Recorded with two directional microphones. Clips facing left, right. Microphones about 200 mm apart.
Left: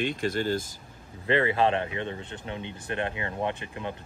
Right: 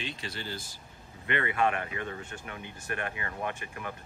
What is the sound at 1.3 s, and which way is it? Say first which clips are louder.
Speech: left 5 dB; 30° left (ahead or behind).